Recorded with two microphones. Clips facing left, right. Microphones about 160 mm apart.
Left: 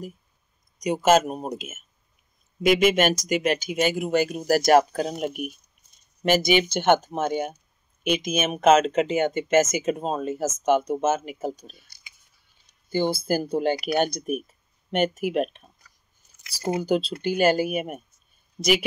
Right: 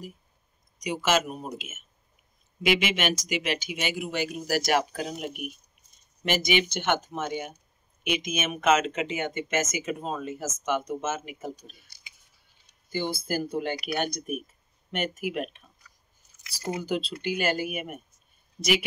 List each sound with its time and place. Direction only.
0.7 s speech: 45° left (ahead or behind)
12.9 s speech: 35° left (ahead or behind)
16.6 s speech: 40° left (ahead or behind)
18.6 s speech: 25° left (ahead or behind)